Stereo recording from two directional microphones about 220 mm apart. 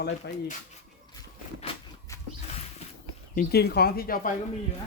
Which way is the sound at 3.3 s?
40° left (ahead or behind).